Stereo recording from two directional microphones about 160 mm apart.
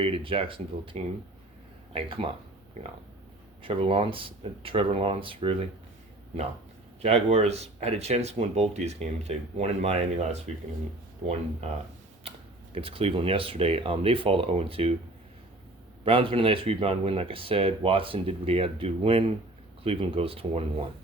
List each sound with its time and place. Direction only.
0.0 s speech: 35° right (ahead or behind)
3.6 s speech: 35° right (ahead or behind)
7.0 s speech: 40° right (ahead or behind)
12.2 s a sound: 40° right (ahead or behind)
12.7 s speech: 35° right (ahead or behind)
16.0 s speech: 35° right (ahead or behind)